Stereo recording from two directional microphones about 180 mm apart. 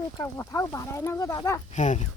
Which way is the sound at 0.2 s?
15° left (ahead or behind).